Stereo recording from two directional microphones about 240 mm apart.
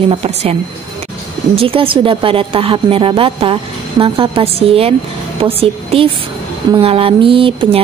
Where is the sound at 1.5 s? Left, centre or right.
Right.